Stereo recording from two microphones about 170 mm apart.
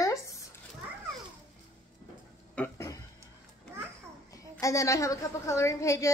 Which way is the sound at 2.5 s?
15° left (ahead or behind).